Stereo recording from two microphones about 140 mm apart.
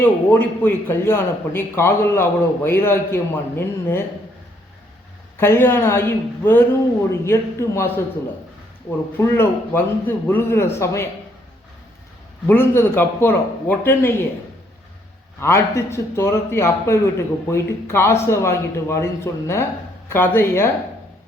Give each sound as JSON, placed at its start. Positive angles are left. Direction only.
{"t": 0.0, "sound": "a man's voice", "side_deg": 15}
{"t": 5.4, "sound": "a man's voice", "side_deg": 15}
{"t": 9.1, "sound": "a man's voice", "side_deg": 15}
{"t": 12.5, "sound": "a man's voice", "side_deg": 15}
{"t": 15.4, "sound": "a man's voice", "side_deg": 20}